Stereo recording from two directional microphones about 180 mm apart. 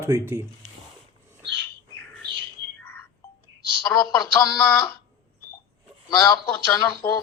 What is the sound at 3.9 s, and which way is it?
Speech, 15° left (ahead or behind).